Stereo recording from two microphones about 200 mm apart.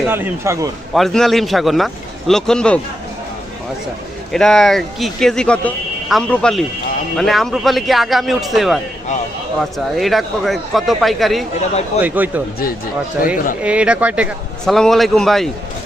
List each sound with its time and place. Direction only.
0.1 s a man's voice: 10° right (ahead or behind)
0.9 s a man's voice: centre (ahead or behind)
4.3 s a man's voice: 5° left (ahead or behind)
13.2 s speech: 45° left (ahead or behind)
13.6 s a man's voice: 5° right (ahead or behind)